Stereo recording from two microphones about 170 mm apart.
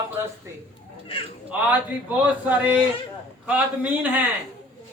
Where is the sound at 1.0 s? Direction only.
30° left (ahead or behind).